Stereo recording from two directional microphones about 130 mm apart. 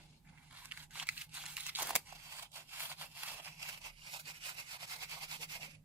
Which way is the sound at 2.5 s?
15° right (ahead or behind).